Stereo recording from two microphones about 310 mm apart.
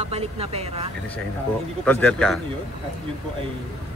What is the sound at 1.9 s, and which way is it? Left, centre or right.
Speech, centre.